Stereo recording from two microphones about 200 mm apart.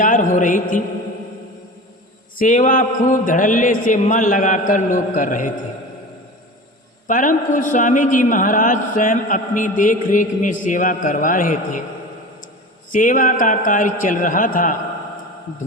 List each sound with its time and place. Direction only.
0.0 s a man's voice: 40° left (ahead or behind)
2.4 s a man's voice: 40° left (ahead or behind)
7.1 s a man's voice: 40° left (ahead or behind)
12.9 s a man's voice: 40° left (ahead or behind)